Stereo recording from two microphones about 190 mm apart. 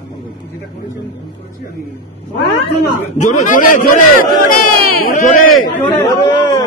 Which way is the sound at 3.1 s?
40° left (ahead or behind).